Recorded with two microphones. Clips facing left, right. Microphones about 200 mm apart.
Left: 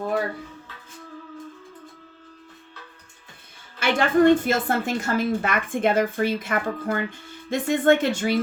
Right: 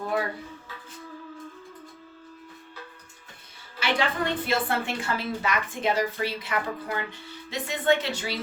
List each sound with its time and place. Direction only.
3.8 s a woman's voice: 50° left (ahead or behind)